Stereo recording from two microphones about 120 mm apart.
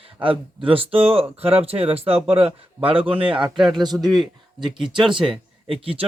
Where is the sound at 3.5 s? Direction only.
Centre (ahead or behind).